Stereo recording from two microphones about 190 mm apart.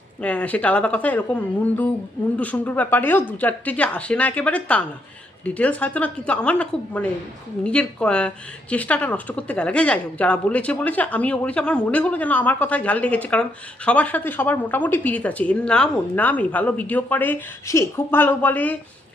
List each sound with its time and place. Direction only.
0.2 s speech: 5° left (ahead or behind)
2.4 s a woman's voice: 10° left (ahead or behind)